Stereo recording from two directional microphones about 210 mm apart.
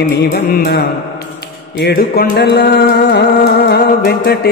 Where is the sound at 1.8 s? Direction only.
50° left (ahead or behind).